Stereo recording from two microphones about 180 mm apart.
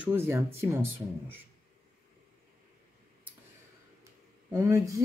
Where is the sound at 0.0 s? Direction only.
15° right (ahead or behind).